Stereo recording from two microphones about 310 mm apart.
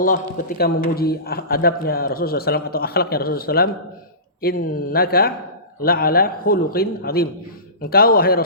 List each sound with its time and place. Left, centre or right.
0.0 s a man's voice: left